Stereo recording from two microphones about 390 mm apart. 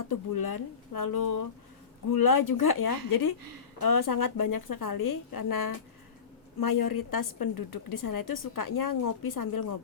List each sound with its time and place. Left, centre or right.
0.1 s a woman's voice: left